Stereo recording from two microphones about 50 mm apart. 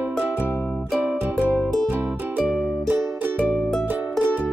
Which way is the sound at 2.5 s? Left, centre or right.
Centre.